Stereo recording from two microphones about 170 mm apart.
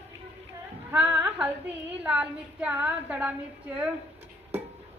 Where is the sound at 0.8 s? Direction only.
10° right (ahead or behind).